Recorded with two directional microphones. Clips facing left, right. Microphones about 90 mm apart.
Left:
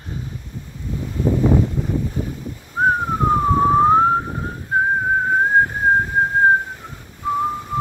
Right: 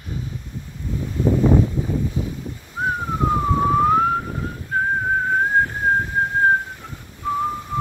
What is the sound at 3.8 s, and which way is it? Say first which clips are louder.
Theremin: left 3 dB; 35° left (ahead or behind).